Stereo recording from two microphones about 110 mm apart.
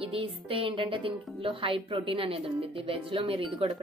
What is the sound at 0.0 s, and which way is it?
A woman's voice, 55° right (ahead or behind).